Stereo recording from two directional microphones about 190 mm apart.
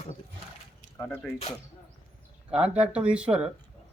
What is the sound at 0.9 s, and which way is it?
Speech, 5° left (ahead or behind).